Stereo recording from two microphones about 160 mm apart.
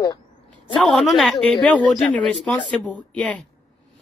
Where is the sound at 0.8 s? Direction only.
Centre (ahead or behind).